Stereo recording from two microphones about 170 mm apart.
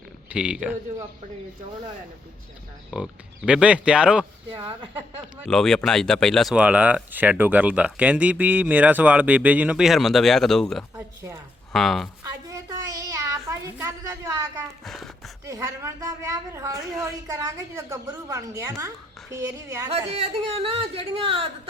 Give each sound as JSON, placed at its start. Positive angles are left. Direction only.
{"t": 0.3, "sound": "speech", "side_deg": -5}
{"t": 2.9, "sound": "speech", "side_deg": -5}
{"t": 5.5, "sound": "speech", "side_deg": 5}
{"t": 10.9, "sound": "speech", "side_deg": -15}
{"t": 11.7, "sound": "speech", "side_deg": 0}
{"t": 12.2, "sound": "a sound", "side_deg": -20}
{"t": 14.8, "sound": "a sound", "side_deg": 0}
{"t": 15.4, "sound": "a woman's voice", "side_deg": -20}
{"t": 19.9, "sound": "speech", "side_deg": -35}